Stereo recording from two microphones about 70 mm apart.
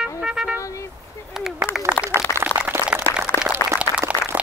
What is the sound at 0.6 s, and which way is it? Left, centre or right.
Vehicle, left.